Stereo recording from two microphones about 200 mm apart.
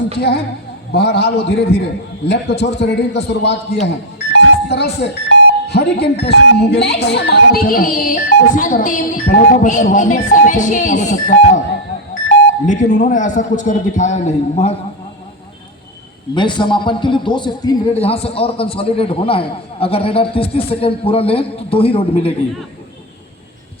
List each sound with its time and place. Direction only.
0.9 s a man's voice: 55° left (ahead or behind)
4.3 s a sound: 55° left (ahead or behind)
5.6 s speech: 55° left (ahead or behind); by 11.6 s 35° left (ahead or behind)
12.6 s speech: 35° left (ahead or behind)
16.3 s a man's voice: 25° left (ahead or behind)